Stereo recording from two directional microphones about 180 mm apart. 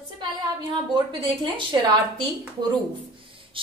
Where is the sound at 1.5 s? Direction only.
25° right (ahead or behind).